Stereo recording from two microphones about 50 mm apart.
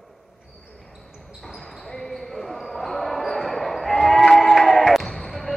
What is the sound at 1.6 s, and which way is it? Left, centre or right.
Basketball bounce, centre.